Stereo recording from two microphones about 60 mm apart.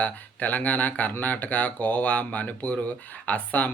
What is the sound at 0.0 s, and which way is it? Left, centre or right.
Speech, left.